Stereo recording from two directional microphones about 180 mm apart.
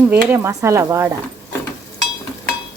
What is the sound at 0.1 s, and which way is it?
A woman's voice, 10° right (ahead or behind).